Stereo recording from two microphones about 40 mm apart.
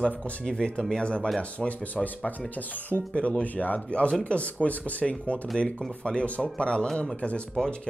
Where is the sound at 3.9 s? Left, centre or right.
Left.